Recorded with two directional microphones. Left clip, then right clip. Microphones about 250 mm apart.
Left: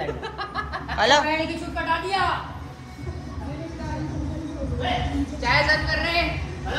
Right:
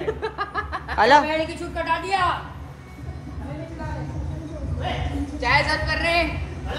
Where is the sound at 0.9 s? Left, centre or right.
Centre.